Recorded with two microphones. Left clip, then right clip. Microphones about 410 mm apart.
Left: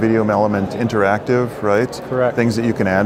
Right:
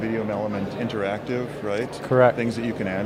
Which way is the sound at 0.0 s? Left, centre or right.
Left.